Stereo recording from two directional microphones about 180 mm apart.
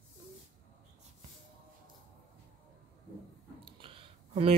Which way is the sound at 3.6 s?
30° right (ahead or behind).